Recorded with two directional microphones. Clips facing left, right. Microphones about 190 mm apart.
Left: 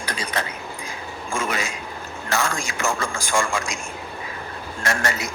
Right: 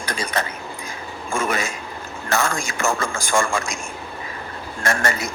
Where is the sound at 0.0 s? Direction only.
45° right (ahead or behind).